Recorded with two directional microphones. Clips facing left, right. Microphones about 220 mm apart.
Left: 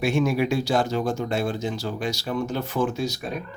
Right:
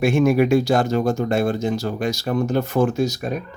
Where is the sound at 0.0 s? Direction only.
50° right (ahead or behind).